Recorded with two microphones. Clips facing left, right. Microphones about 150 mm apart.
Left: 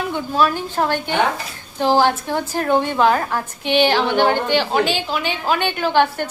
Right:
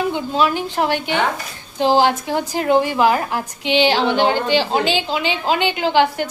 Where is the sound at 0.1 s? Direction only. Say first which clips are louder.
Even; 15° right (ahead or behind).